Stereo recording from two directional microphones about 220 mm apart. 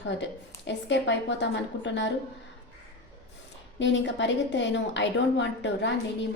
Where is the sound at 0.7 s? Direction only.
55° left (ahead or behind).